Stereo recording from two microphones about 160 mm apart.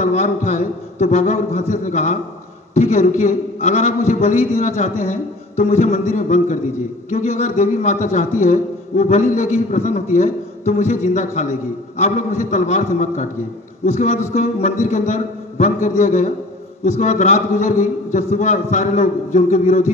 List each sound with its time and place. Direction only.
0.0 s a man's voice: 50° left (ahead or behind)